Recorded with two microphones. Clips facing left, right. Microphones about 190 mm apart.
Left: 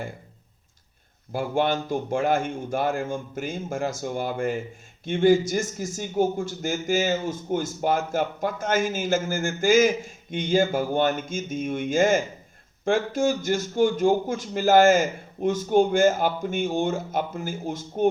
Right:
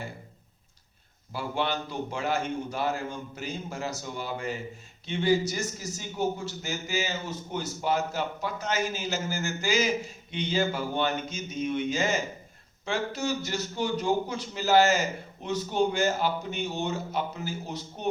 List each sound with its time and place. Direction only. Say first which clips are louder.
1.3 s a man's voice: left 6 dB; 50° left (ahead or behind)